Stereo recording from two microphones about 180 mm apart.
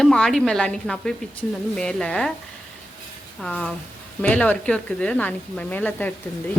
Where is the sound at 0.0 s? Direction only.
5° left (ahead or behind).